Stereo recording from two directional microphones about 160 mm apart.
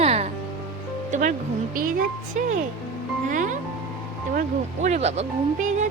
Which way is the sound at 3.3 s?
50° right (ahead or behind).